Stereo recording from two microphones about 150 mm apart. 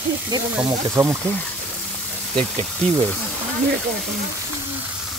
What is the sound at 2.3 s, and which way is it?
Speech, 45° right (ahead or behind).